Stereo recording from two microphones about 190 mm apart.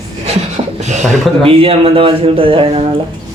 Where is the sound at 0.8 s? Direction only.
40° right (ahead or behind).